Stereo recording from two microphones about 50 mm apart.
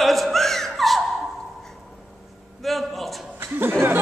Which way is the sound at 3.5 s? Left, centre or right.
Right.